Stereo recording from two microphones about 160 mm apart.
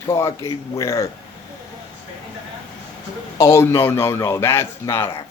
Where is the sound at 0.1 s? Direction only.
20° left (ahead or behind).